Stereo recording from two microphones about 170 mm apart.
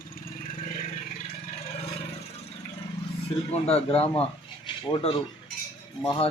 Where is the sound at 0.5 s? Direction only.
50° left (ahead or behind).